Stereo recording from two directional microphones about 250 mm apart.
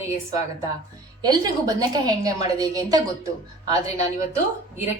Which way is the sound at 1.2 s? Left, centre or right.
Centre.